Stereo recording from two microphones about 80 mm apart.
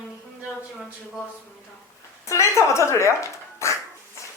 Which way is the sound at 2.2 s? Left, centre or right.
Left.